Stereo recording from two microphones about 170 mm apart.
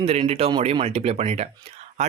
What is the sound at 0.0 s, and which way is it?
Speech, 35° right (ahead or behind).